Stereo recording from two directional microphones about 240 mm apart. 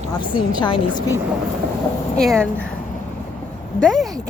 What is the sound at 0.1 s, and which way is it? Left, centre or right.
A woman's voice, centre.